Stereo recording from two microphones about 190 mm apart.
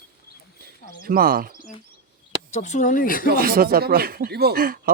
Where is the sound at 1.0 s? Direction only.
50° right (ahead or behind).